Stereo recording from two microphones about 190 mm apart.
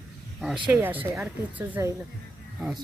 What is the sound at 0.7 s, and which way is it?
Speech, 10° right (ahead or behind).